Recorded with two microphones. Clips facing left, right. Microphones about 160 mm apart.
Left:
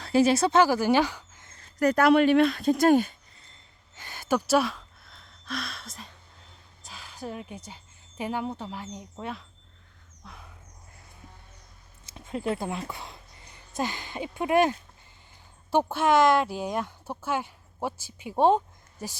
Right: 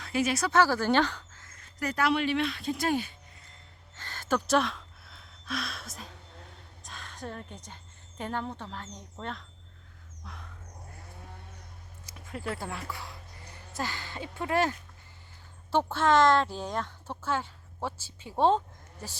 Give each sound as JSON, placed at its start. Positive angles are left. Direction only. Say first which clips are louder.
{"t": 0.0, "sound": "a woman's voice", "louder": "left 7 dB", "side_deg": 30}
{"t": 1.8, "sound": "speech", "louder": "left 8 dB", "side_deg": 45}
{"t": 3.9, "sound": "a sound", "louder": "left 3 dB", "side_deg": 10}
{"t": 8.2, "sound": "speech", "louder": "left 4 dB", "side_deg": 10}
{"t": 10.2, "sound": "a sound", "louder": "even", "side_deg": 5}
{"t": 12.0, "sound": "speech", "louder": "left 7 dB", "side_deg": 25}